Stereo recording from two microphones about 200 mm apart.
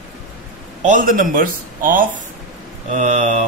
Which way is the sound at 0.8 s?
40° right (ahead or behind).